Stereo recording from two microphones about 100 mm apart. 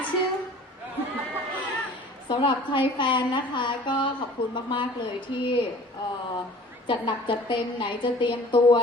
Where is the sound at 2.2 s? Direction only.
55° left (ahead or behind).